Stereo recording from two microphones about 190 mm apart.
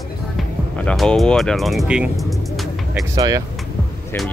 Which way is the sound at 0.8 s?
5° left (ahead or behind).